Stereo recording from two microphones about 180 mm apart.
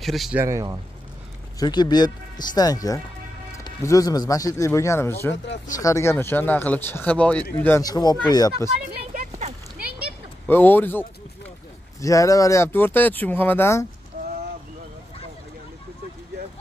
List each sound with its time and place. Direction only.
0.0 s speech: centre (ahead or behind)
0.4 s speech: 15° right (ahead or behind)
1.6 s speech: 25° left (ahead or behind)
8.9 s a sound: 50° right (ahead or behind)
9.8 s a sound: 10° right (ahead or behind)
10.5 s speech: 10° left (ahead or behind)